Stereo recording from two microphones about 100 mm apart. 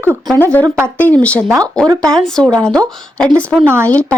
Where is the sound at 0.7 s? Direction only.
25° right (ahead or behind).